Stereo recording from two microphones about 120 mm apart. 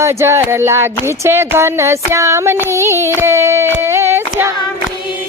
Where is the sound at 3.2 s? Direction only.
20° right (ahead or behind).